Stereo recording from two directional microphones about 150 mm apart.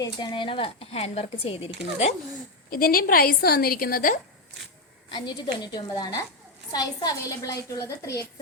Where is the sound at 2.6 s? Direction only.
75° left (ahead or behind).